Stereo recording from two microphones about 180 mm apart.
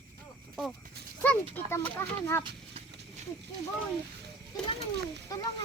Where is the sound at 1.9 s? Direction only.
15° left (ahead or behind).